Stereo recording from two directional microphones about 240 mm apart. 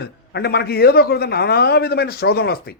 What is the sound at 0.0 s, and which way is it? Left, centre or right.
Speech, left.